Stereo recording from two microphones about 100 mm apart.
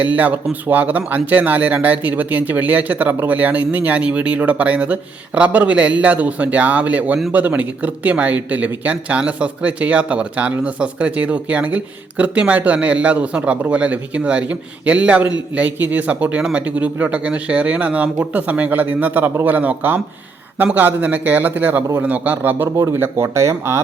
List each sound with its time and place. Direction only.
0.0 s speech: 15° right (ahead or behind)